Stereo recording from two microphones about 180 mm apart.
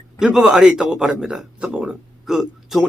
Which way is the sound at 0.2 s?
Centre (ahead or behind).